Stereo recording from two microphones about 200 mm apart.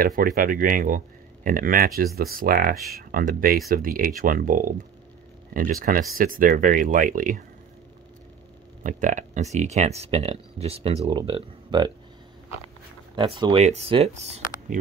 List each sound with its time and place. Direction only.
0.0 s speech: 45° right (ahead or behind)
8.8 s speech: 40° right (ahead or behind); by 11.9 s 25° right (ahead or behind)
13.1 s speech: 25° right (ahead or behind)